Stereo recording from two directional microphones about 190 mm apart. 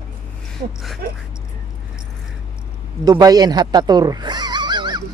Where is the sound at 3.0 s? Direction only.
20° right (ahead or behind).